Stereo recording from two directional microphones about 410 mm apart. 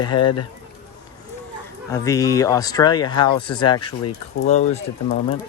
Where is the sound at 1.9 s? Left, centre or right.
Centre.